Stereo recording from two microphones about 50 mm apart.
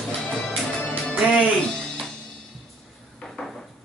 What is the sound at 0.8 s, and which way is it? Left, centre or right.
Music, centre.